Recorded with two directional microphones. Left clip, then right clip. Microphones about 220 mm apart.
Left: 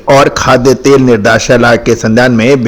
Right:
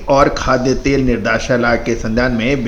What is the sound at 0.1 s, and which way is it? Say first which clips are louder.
A man's voice: left 7 dB; 45° left (ahead or behind).